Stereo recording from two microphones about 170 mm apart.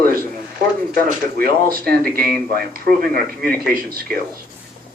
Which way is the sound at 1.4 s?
60° right (ahead or behind).